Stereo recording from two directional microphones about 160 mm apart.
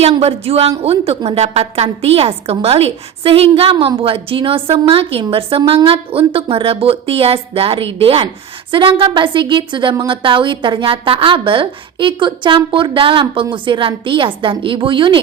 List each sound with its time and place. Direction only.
0.0 s a woman's voice: 40° right (ahead or behind)